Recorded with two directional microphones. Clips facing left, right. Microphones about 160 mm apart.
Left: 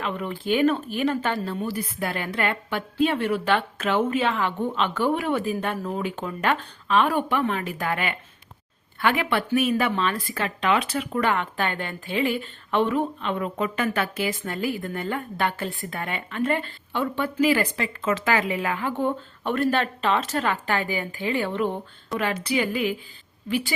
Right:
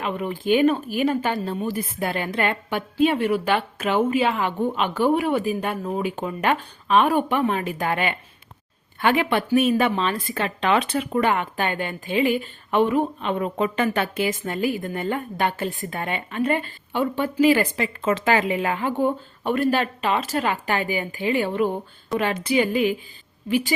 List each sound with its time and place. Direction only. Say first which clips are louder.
0.0 s speech: right 3 dB; 15° right (ahead or behind)